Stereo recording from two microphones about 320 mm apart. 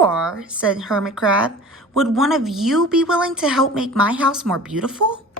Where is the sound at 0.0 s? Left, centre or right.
Centre.